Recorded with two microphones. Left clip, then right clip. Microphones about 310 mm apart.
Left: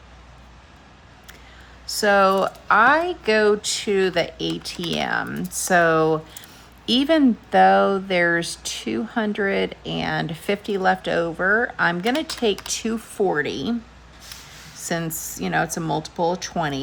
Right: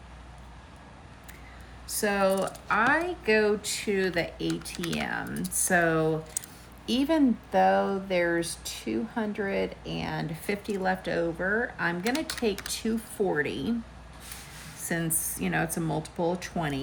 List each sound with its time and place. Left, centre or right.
2.0 s speech: centre
14.8 s speech: centre